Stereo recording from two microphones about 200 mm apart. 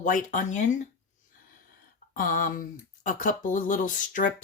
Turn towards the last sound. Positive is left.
turn(degrees=40)  # may be behind; listen again after turning